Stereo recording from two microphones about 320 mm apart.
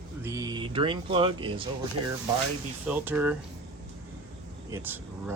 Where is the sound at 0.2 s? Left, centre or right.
Centre.